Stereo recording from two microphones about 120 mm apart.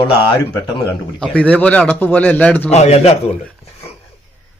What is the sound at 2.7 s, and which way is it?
Speech, 65° left (ahead or behind).